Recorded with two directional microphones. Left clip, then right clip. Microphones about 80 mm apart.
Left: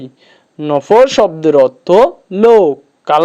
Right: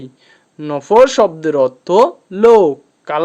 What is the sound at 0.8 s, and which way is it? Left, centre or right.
Speech, left.